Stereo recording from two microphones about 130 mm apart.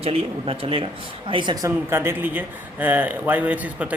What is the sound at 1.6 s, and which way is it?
Speech, 20° right (ahead or behind).